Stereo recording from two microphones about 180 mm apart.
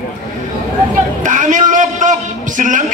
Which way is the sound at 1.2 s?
45° right (ahead or behind).